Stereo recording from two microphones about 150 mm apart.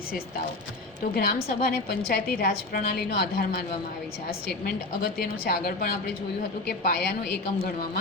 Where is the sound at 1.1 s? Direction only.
85° left.